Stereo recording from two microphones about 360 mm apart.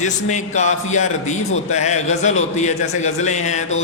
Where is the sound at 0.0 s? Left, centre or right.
Centre.